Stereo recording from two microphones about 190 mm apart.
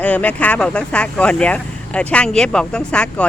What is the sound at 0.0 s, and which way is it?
Speech, 5° left (ahead or behind).